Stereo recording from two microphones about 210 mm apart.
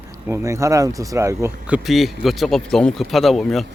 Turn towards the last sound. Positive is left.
turn(degrees=0)  # may be behind; listen again after turning